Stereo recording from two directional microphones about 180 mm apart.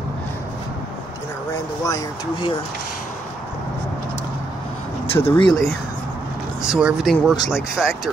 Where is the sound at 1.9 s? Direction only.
20° left (ahead or behind).